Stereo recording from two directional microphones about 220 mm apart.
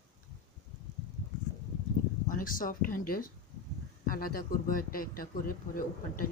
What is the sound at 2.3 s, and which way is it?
A man's voice, 40° left (ahead or behind).